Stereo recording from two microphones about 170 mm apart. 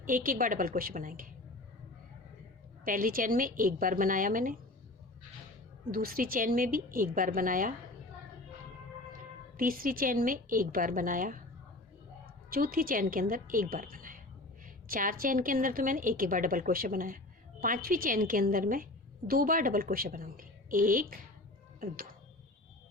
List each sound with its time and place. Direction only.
0.0 s a woman's voice: 55° right (ahead or behind)
2.8 s a woman's voice: 55° right (ahead or behind)
5.9 s a woman's voice: 60° right (ahead or behind)
9.6 s a woman's voice: 55° right (ahead or behind)
12.5 s a woman's voice: 60° right (ahead or behind)